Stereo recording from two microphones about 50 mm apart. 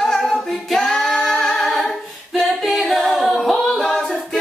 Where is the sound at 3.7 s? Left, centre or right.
Centre.